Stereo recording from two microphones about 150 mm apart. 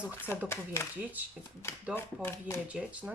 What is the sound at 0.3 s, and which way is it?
Speech, 15° left (ahead or behind).